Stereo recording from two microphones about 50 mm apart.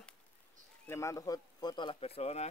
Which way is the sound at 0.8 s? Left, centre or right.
Left.